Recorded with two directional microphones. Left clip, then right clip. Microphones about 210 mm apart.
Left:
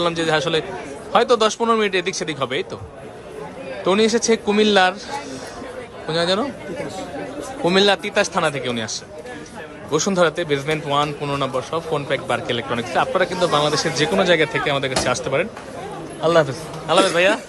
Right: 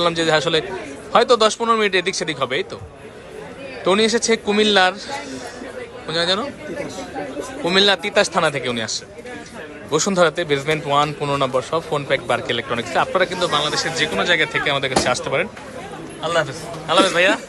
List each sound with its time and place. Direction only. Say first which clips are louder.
0.0 s a man's voice: right 2 dB; 15° left (ahead or behind)
3.8 s a man's voice: even; 15° left (ahead or behind)
6.1 s a man's voice: even; 20° left (ahead or behind)
7.6 s a man's voice: even; 20° left (ahead or behind)